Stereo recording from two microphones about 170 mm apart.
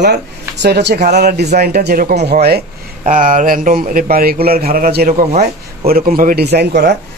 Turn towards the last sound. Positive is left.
turn(degrees=-75)  # may be behind; listen again after turning